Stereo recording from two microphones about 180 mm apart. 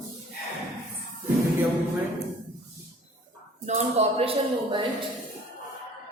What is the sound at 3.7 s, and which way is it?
A woman's voice, 35° right (ahead or behind).